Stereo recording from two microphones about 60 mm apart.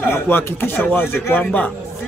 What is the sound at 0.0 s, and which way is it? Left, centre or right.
A man's voice, left.